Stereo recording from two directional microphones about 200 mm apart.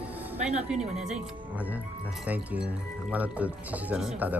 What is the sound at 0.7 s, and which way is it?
Speech, 5° right (ahead or behind).